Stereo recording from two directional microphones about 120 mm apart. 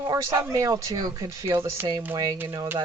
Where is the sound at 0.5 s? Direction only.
30° right (ahead or behind).